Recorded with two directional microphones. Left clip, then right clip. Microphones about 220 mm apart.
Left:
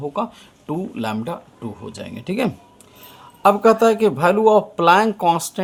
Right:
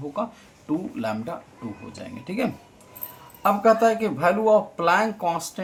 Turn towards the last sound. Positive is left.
turn(degrees=50)  # may be behind; listen again after turning